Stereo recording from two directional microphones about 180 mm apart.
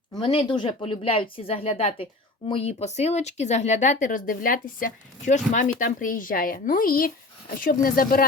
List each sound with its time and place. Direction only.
0.2 s speech: 25° left (ahead or behind); by 8.2 s 55° left (ahead or behind)